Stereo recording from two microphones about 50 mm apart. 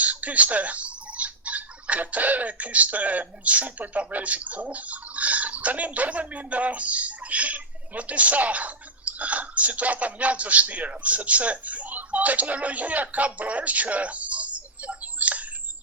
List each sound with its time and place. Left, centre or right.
0.0 s speech: right